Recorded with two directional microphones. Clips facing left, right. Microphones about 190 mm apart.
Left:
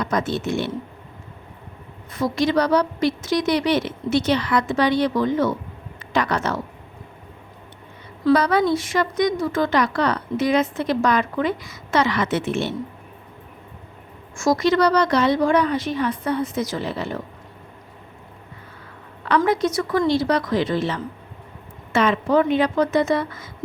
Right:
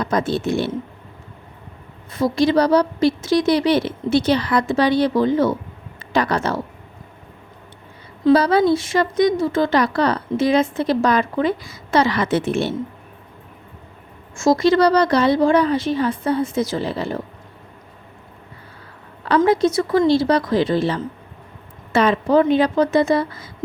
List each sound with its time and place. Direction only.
0.0 s speech: 30° right (ahead or behind)
2.1 s speech: 30° right (ahead or behind)
8.2 s speech: 30° right (ahead or behind)
14.3 s speech: 25° right (ahead or behind)
19.4 s a woman's voice: 25° right (ahead or behind)